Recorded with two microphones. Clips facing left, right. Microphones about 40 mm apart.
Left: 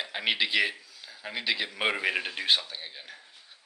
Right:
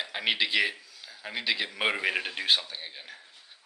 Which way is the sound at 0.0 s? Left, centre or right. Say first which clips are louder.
Even; centre.